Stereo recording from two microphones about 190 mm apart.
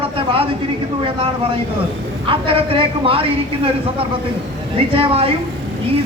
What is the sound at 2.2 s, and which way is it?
A woman's voice, 30° right (ahead or behind).